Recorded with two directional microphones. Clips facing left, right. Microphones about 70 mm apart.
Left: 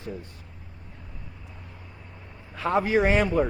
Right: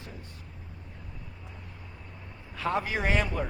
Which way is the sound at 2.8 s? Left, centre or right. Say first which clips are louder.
Left 7 dB; left.